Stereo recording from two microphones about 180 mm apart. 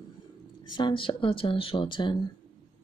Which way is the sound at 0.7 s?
25° left (ahead or behind).